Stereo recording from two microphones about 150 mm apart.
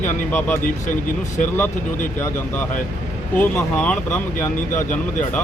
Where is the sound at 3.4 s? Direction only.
15° left (ahead or behind).